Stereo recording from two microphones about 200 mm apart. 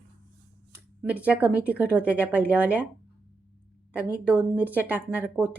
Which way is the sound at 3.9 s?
5° right (ahead or behind).